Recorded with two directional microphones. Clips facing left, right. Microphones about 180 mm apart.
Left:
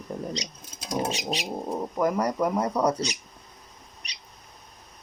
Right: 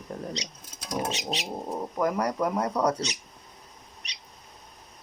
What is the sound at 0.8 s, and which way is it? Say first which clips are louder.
Bird: left 2 dB; 30° left (ahead or behind).